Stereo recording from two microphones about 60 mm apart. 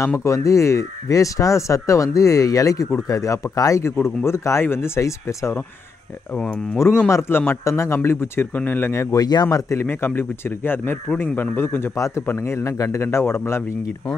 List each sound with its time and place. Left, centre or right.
0.2 s speech: left
3.5 s speech: left
4.0 s speech: left
7.1 s speech: left
7.6 s speech: left
9.1 s speech: left
9.8 s speech: left
12.4 s speech: left